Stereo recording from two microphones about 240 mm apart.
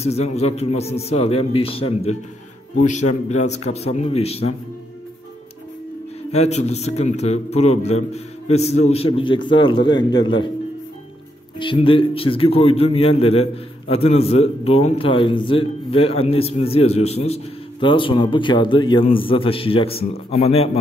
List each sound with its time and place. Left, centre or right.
0.0 s a man's voice: left
6.3 s a man's voice: left
11.5 s a man's voice: centre